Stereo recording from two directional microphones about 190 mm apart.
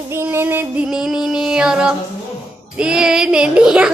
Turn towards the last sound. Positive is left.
turn(degrees=-5)  # may be behind; listen again after turning